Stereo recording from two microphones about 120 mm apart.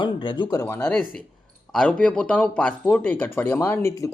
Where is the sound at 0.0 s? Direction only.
40° left (ahead or behind).